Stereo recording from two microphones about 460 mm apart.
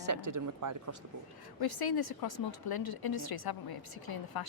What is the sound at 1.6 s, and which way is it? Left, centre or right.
A woman's voice, left.